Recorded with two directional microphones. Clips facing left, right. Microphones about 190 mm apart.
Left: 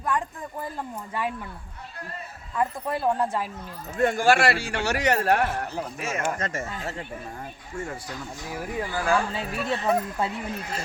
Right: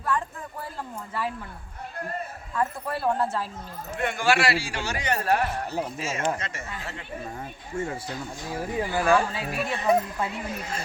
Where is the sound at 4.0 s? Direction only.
40° left (ahead or behind); by 6.2 s 60° left (ahead or behind).